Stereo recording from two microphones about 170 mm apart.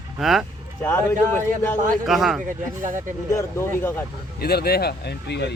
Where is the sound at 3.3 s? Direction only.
15° left (ahead or behind).